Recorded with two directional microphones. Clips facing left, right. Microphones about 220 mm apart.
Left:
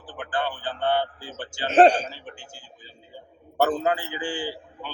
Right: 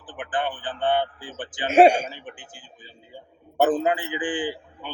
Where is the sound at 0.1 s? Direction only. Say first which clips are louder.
Right 1 dB; 20° right (ahead or behind).